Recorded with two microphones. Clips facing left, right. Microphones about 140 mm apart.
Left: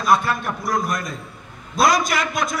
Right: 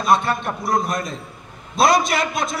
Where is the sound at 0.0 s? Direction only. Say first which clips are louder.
Right 1 dB; 25° right (ahead or behind).